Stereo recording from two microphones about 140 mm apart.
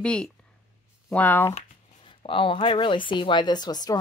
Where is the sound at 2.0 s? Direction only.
40° left (ahead or behind).